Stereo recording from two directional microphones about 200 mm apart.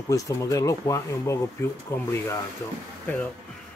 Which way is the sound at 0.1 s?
15° left (ahead or behind).